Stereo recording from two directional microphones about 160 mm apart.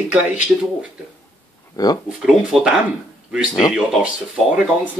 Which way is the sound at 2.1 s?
5° right (ahead or behind).